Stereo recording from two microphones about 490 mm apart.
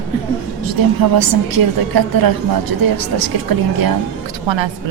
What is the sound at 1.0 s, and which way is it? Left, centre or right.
A woman's voice, right.